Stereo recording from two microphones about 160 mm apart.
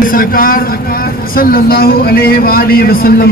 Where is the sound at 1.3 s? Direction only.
65° left (ahead or behind).